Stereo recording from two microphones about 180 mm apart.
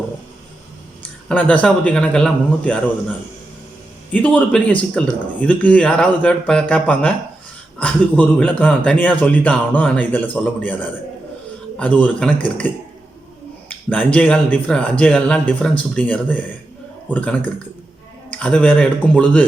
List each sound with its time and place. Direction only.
1.3 s speech: 10° left (ahead or behind)
4.1 s speech: 5° left (ahead or behind)
13.7 s speech: 5° left (ahead or behind)